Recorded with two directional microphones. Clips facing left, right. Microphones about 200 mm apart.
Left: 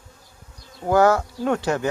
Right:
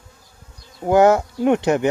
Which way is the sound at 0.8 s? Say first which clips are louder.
Right 3 dB; 20° right (ahead or behind).